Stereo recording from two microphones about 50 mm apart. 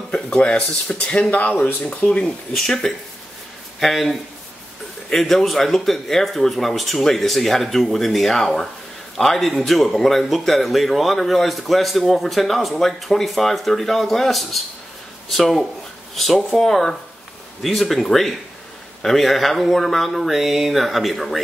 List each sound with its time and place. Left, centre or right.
0.1 s speech: left
1.3 s speech: left
2.2 s speech: centre
3.8 s a man's voice: centre